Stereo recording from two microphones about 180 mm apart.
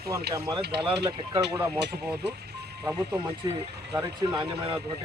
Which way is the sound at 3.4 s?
20° right (ahead or behind).